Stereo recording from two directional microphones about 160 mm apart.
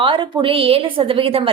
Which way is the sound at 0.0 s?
35° right (ahead or behind).